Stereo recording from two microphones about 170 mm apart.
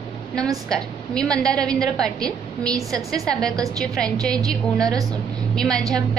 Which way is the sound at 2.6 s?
20° right (ahead or behind).